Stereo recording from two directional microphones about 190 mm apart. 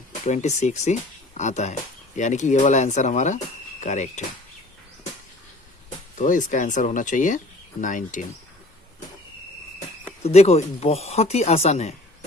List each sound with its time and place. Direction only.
0.3 s speech: 35° left (ahead or behind)
6.1 s speech: 40° left (ahead or behind)
10.2 s speech: 35° left (ahead or behind)